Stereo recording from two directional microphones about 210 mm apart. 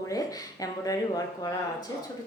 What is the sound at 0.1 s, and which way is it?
Speech, 15° left (ahead or behind).